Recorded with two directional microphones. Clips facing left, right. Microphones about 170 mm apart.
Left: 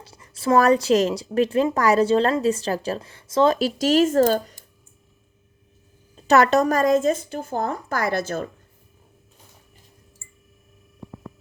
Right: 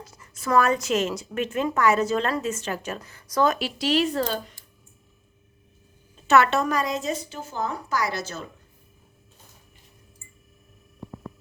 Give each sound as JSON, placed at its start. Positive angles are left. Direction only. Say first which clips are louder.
{"t": 0.0, "sound": "a woman's voice", "louder": "left 7 dB", "side_deg": 30}
{"t": 3.6, "sound": "speech", "louder": "left 5 dB", "side_deg": 45}
{"t": 6.1, "sound": "speech", "louder": "left 3 dB", "side_deg": 35}